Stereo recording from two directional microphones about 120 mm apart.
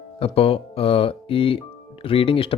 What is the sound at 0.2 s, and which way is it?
Speech, 50° left (ahead or behind).